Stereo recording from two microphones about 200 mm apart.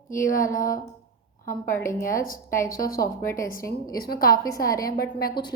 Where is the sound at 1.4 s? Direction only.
15° left (ahead or behind).